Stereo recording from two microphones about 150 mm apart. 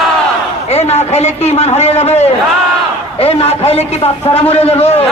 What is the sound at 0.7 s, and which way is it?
A man's voice, 45° left (ahead or behind).